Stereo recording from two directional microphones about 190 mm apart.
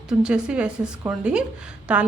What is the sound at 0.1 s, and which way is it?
A woman's voice, 5° right (ahead or behind).